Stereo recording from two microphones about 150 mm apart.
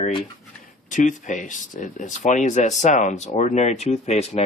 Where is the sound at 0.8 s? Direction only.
55° left (ahead or behind).